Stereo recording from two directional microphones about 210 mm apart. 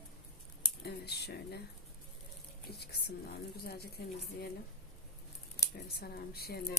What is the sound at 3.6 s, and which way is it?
Speech, 50° left (ahead or behind).